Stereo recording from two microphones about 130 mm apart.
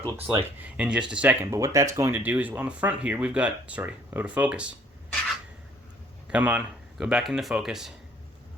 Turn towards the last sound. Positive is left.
turn(degrees=-5)  # may be behind; listen again after turning